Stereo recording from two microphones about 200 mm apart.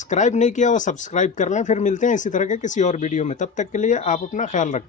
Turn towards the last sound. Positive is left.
turn(degrees=40)  # may be behind; listen again after turning